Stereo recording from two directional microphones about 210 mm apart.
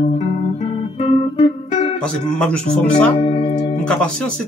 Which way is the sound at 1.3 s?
30° left (ahead or behind).